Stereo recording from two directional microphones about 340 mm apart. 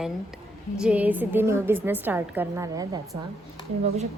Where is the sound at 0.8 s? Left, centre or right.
Centre.